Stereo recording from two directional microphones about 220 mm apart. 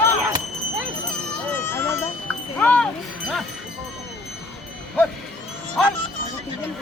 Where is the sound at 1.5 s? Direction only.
10° left (ahead or behind).